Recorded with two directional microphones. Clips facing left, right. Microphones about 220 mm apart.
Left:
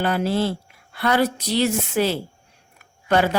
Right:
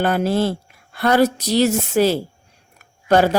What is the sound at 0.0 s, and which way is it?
Speech, 50° right (ahead or behind).